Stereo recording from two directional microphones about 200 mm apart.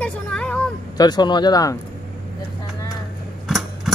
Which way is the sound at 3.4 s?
Centre (ahead or behind).